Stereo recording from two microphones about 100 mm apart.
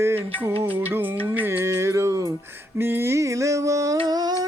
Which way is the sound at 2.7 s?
25° right (ahead or behind).